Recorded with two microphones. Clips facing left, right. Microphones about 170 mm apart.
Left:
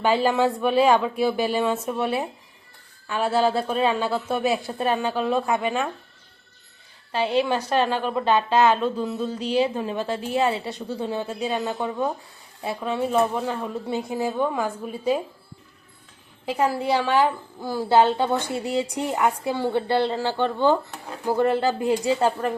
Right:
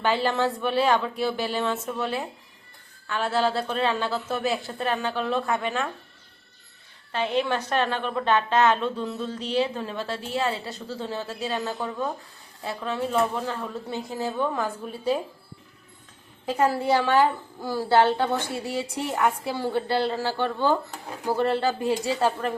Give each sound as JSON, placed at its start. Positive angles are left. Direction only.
{"t": 0.0, "sound": "a woman's voice", "side_deg": 10}
{"t": 7.1, "sound": "a woman's voice", "side_deg": 10}
{"t": 12.8, "sound": "a woman's voice", "side_deg": 10}
{"t": 16.5, "sound": "a woman's voice", "side_deg": 10}